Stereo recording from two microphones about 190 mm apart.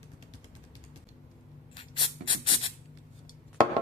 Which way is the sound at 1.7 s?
25° left (ahead or behind).